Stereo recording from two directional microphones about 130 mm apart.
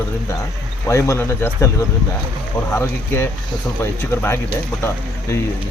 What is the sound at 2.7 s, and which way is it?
Speech, 20° left (ahead or behind).